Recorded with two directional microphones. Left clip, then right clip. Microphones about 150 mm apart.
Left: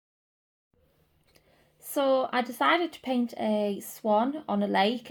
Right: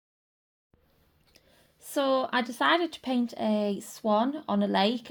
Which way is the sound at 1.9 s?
35° right (ahead or behind).